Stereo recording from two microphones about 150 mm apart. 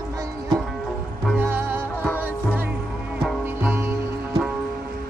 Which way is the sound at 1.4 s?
15° right (ahead or behind).